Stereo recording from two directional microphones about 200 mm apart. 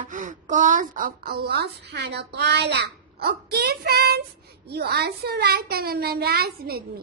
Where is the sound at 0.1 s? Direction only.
40° right (ahead or behind).